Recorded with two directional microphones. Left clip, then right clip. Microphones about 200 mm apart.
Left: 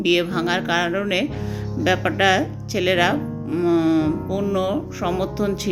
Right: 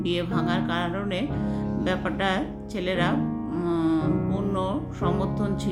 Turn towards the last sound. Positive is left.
turn(degrees=20)  # may be behind; listen again after turning